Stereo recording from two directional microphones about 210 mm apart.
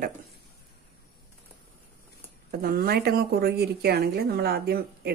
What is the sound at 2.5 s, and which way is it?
Speech, 45° right (ahead or behind).